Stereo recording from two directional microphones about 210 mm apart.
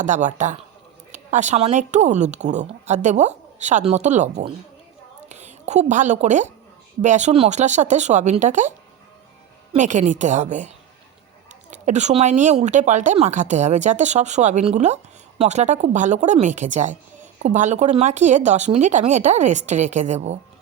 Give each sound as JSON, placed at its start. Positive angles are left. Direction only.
{"t": 0.0, "sound": "a woman's voice", "side_deg": -35}
{"t": 9.7, "sound": "speech", "side_deg": -35}
{"t": 11.7, "sound": "speech", "side_deg": -35}